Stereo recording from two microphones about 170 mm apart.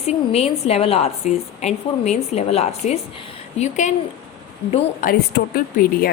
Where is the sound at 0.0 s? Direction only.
40° left (ahead or behind).